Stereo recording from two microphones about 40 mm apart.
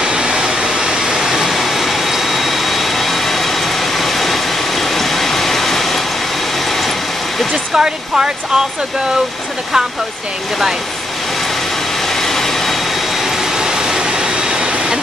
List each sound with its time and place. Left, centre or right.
0.0 s vehicle: centre
7.5 s speech: centre
12.1 s vehicle: centre
13.2 s vehicle: centre